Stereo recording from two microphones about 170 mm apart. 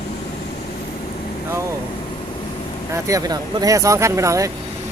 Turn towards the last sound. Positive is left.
turn(degrees=-20)  # may be behind; listen again after turning